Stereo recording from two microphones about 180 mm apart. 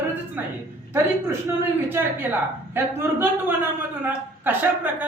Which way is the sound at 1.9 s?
10° right (ahead or behind).